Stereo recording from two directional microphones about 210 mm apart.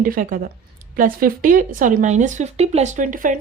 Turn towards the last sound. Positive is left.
turn(degrees=-40)  # may be behind; listen again after turning